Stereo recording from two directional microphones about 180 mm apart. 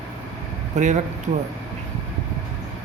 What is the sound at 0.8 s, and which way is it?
Speech, 40° right (ahead or behind).